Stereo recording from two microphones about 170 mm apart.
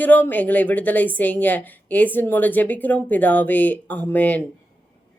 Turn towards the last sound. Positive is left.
turn(degrees=10)  # may be behind; listen again after turning